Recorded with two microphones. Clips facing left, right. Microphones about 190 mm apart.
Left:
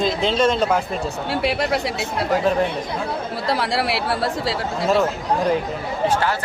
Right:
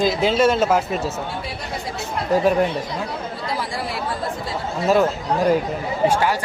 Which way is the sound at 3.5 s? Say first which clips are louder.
Left 7 dB; 75° left (ahead or behind).